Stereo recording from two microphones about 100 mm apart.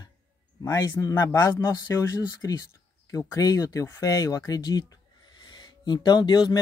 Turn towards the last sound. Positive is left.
turn(degrees=45)  # may be behind; listen again after turning